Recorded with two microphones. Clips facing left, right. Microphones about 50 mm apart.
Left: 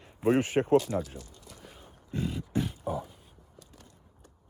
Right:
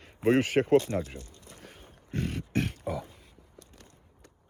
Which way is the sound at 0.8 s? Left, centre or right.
Right.